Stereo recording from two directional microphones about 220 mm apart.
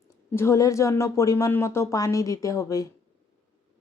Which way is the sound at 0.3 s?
10° left (ahead or behind).